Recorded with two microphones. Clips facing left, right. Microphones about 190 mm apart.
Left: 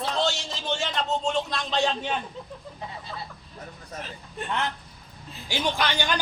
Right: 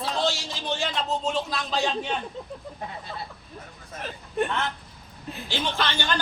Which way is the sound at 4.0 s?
60° right (ahead or behind).